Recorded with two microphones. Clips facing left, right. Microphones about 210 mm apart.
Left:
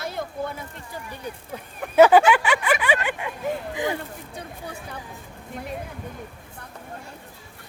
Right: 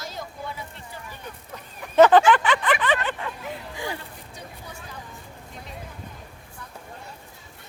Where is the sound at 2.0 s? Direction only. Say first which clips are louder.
Left 1 dB; 10° left (ahead or behind).